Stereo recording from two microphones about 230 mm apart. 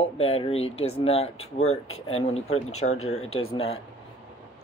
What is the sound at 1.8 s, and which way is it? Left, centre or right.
Speech, left.